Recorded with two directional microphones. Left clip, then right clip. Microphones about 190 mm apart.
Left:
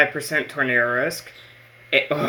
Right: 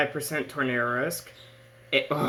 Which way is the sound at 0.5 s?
Centre (ahead or behind).